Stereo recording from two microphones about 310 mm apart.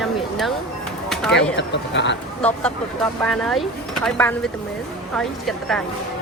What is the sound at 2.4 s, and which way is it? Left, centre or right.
Speech, centre.